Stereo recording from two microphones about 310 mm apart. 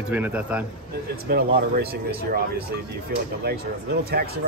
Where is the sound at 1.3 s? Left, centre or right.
Right.